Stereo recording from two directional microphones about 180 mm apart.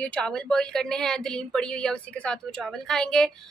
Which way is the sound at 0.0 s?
5° left (ahead or behind).